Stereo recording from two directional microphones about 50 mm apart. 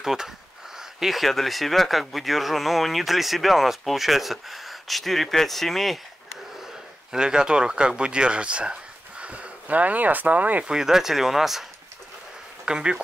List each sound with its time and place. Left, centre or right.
0.0 s speech: centre
7.1 s speech: centre; by 10.6 s right
10.6 s speech: centre
12.6 s speech: centre